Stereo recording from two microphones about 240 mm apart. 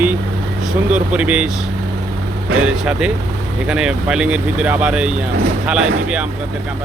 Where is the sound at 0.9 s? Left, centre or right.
Centre.